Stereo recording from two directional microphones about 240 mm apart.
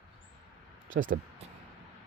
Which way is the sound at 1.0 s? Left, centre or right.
Right.